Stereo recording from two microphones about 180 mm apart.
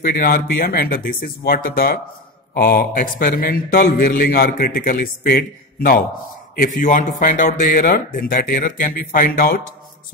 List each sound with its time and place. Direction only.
0.0 s a man's voice: 50° left (ahead or behind)